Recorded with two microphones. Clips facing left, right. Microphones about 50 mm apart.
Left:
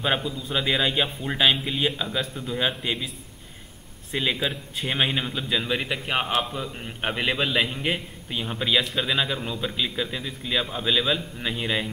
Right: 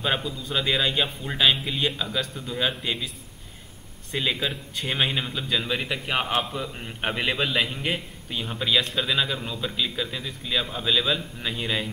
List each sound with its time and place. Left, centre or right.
0.0 s a man's voice: centre
4.1 s a man's voice: centre